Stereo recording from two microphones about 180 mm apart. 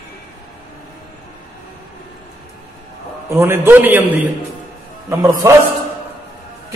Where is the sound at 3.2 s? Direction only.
15° right (ahead or behind).